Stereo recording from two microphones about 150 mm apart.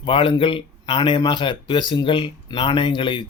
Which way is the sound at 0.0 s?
35° left (ahead or behind).